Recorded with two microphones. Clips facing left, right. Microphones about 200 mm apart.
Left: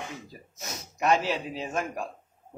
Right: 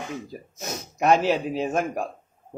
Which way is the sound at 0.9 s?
55° right (ahead or behind).